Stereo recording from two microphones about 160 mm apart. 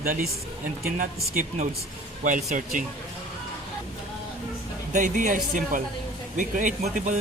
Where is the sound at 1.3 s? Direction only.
50° right (ahead or behind).